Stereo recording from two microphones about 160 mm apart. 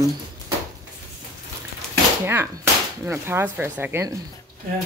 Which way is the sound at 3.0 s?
15° right (ahead or behind).